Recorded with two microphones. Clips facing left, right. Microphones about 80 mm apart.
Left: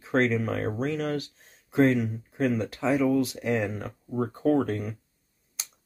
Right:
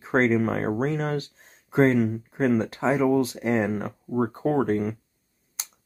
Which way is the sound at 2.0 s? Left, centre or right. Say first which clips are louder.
Right 7 dB; right.